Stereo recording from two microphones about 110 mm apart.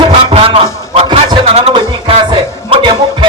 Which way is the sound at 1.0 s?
40° right (ahead or behind).